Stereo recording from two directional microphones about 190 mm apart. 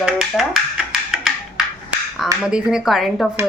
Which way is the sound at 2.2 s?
5° right (ahead or behind).